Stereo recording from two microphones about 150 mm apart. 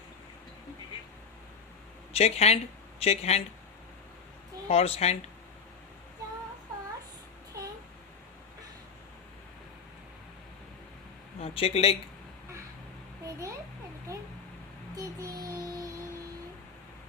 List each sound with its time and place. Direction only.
2.1 s speech: 45° left (ahead or behind)
4.7 s speech: 40° left (ahead or behind)
11.3 s a man's voice: 40° left (ahead or behind)
14.1 s a sound: 20° right (ahead or behind)
14.9 s child singing: 25° right (ahead or behind)